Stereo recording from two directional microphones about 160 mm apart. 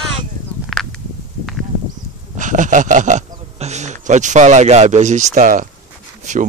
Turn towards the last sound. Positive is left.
turn(degrees=-50)  # may be behind; listen again after turning